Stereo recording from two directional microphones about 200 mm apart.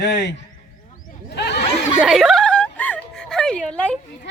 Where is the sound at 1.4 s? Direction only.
55° left (ahead or behind).